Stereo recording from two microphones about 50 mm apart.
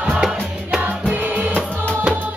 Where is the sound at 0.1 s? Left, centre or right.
Centre.